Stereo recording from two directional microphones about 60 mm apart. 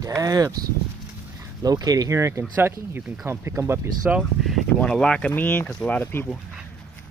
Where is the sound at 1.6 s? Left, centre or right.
Right.